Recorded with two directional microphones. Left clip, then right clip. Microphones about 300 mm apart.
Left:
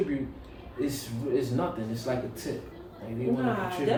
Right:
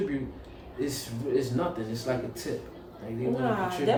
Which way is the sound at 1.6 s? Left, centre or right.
Centre.